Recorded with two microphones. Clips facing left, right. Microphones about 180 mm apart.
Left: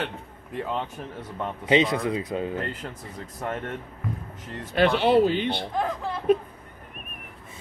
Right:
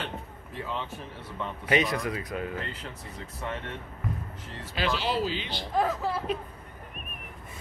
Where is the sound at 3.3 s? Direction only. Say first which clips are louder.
Left 5 dB; 45° left (ahead or behind).